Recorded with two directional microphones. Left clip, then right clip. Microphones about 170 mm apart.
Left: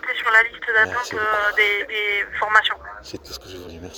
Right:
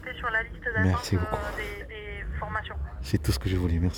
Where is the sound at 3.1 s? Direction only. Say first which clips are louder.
Right 4 dB; 30° right (ahead or behind).